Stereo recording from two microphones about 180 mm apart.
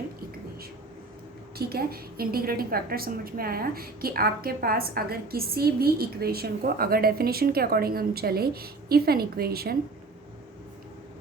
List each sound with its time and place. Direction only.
1.5 s a woman's voice: 60° right (ahead or behind)